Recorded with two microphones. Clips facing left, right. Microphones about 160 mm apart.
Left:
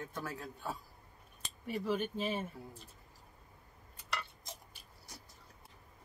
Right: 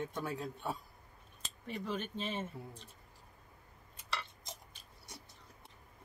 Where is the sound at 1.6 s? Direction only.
5° left (ahead or behind).